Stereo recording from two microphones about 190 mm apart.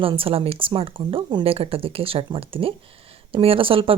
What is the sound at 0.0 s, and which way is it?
Speech, 30° right (ahead or behind).